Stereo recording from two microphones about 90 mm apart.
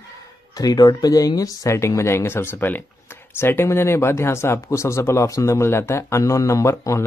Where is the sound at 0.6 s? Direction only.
45° left (ahead or behind).